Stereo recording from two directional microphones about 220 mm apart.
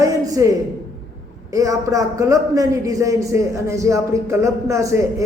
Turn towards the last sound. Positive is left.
turn(degrees=-15)  # may be behind; listen again after turning